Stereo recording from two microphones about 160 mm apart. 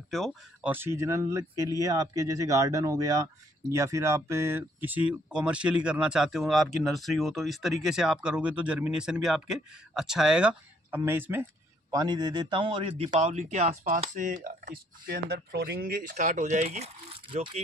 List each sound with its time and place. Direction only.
0.1 s speech: centre (ahead or behind)
0.7 s speech: 15° right (ahead or behind)
11.9 s a man's voice: 25° right (ahead or behind); by 14.8 s 55° right (ahead or behind)
15.0 s a man's voice: 90° right; by 17.6 s 35° right (ahead or behind)